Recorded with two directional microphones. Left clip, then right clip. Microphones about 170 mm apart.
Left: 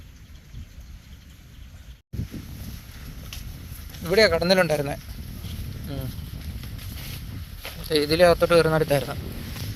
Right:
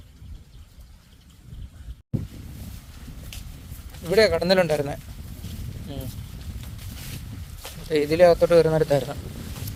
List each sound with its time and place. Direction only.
4.0 s speech: 10° right (ahead or behind)
5.5 s a sound: centre (ahead or behind)
7.9 s speech: 10° right (ahead or behind)